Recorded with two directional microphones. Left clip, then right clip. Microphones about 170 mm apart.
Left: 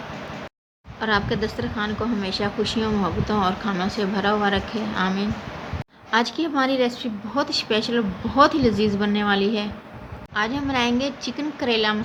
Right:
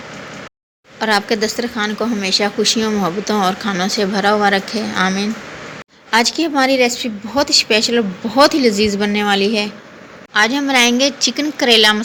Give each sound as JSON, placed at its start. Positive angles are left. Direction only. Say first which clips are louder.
{"t": 0.9, "sound": "a woman's voice", "louder": "right 7 dB", "side_deg": -25}
{"t": 10.3, "sound": "a woman's voice", "louder": "right 10 dB", "side_deg": -25}